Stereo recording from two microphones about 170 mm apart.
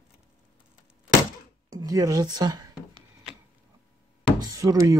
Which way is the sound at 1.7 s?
20° right (ahead or behind).